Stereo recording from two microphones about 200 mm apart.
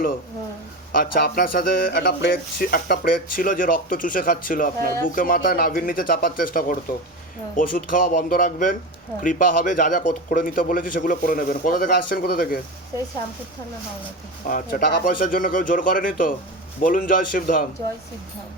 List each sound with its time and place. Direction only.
0.9 s speech: 45° left (ahead or behind)
14.4 s speech: 45° left (ahead or behind)